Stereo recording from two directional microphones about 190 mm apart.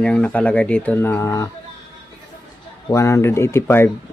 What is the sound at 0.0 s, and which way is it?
Speech, 5° left (ahead or behind).